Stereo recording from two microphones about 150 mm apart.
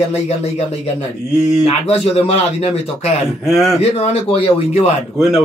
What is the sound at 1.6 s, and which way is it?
Speech, 40° left (ahead or behind).